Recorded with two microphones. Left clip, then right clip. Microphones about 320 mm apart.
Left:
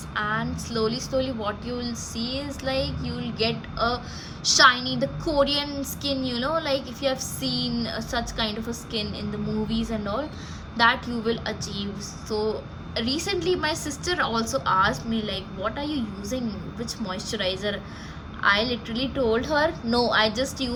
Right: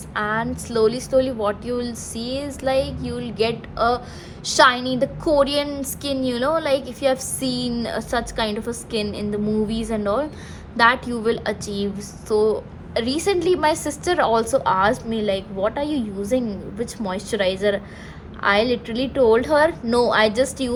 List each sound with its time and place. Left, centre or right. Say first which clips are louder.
0.1 s a woman's voice: right 4 dB; centre